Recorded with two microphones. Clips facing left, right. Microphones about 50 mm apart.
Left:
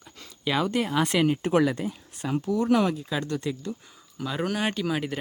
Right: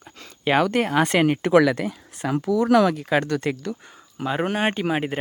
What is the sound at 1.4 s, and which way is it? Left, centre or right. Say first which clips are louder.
Speech: right 6 dB; right.